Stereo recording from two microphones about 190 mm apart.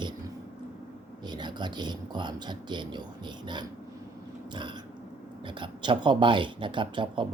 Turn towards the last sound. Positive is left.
turn(degrees=-25)  # may be behind; listen again after turning